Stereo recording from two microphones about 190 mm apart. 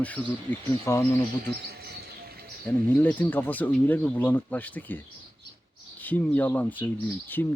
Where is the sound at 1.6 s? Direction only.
55° right (ahead or behind).